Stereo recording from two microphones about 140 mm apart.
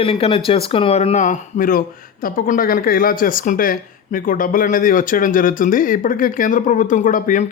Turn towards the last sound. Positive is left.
turn(degrees=65)  # may be behind; listen again after turning